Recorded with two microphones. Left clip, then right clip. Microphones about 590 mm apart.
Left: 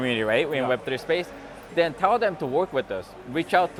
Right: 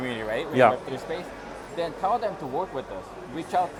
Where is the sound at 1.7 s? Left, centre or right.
Left.